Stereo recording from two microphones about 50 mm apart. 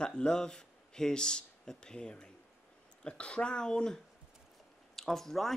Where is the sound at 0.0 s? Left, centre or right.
Centre.